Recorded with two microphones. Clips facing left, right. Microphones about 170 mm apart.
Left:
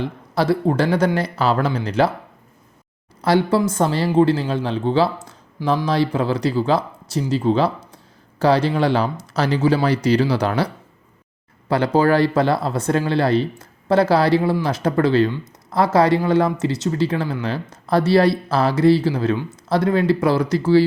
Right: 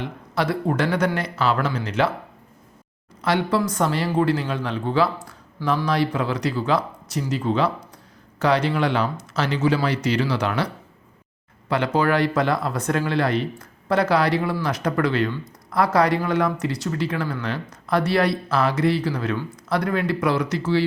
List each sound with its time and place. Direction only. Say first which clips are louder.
0.0 s speech: left 4 dB; 30° left (ahead or behind)
3.2 s speech: left 4 dB; 35° left (ahead or behind)
11.7 s speech: left 4 dB; 35° left (ahead or behind)